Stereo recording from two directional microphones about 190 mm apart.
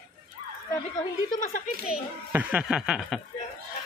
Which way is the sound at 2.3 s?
5° right (ahead or behind).